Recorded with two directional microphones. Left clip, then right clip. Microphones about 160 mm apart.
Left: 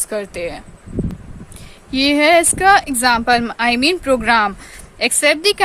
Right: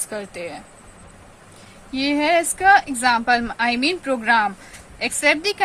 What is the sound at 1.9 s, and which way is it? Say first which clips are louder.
A woman's voice: left 6 dB; 60° left (ahead or behind).